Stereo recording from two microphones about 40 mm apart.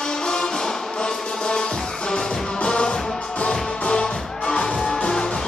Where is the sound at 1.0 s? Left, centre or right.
Left.